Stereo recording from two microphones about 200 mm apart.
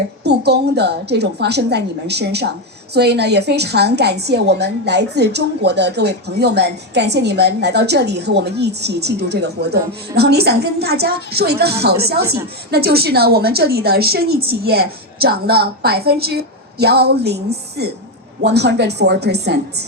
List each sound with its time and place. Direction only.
0.3 s a woman's voice: 55° right (ahead or behind)